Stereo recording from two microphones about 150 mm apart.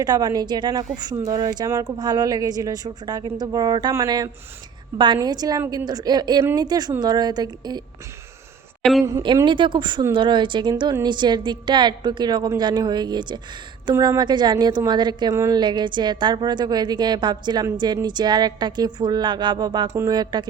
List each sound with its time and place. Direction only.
0.0 s speech: 25° right (ahead or behind)
6.4 s speech: 15° right (ahead or behind)
6.7 s speech: 25° right (ahead or behind)
8.8 s a woman's voice: centre (ahead or behind)
9.2 s speech: 30° right (ahead or behind)